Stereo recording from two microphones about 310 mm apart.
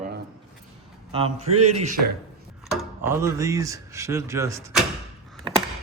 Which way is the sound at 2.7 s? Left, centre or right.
Centre.